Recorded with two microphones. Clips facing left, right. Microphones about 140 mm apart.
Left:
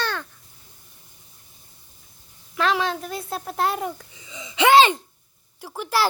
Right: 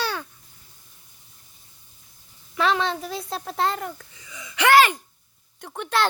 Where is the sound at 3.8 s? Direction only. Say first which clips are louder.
Left 4 dB; 20° left (ahead or behind).